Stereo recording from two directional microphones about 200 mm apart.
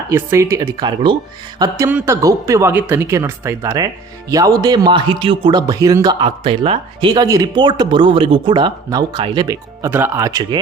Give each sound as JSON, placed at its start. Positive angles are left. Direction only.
{"t": 0.1, "sound": "speech", "side_deg": -10}